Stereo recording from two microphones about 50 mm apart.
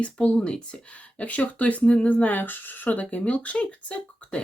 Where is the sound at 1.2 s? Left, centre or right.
Left.